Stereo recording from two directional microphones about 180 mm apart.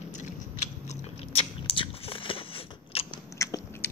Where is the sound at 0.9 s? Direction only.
35° left (ahead or behind).